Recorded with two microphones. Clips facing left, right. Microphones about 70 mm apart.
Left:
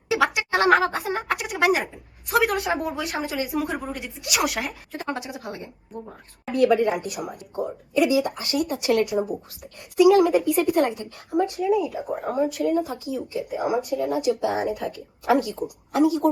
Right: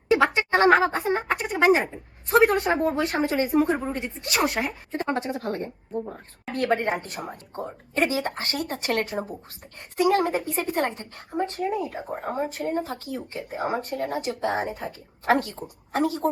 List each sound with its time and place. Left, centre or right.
0.3 s speech: centre
1.7 s a woman's voice: right
6.6 s a woman's voice: right